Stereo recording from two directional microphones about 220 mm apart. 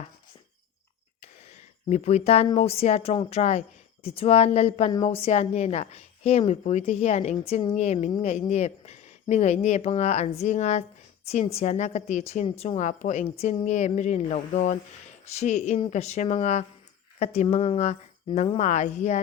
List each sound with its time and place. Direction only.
1.9 s a woman's voice: 30° left (ahead or behind)